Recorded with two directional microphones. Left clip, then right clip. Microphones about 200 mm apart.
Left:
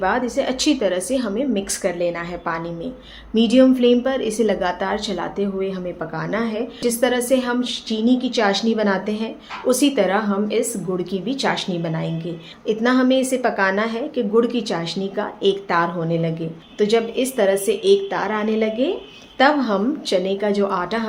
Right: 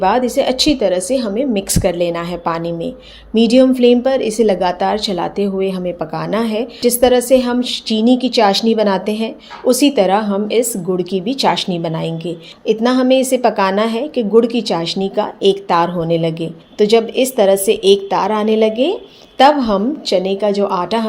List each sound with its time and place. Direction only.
0.0 s a woman's voice: 25° right (ahead or behind)